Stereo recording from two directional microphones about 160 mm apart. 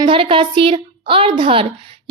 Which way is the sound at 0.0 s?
35° right (ahead or behind).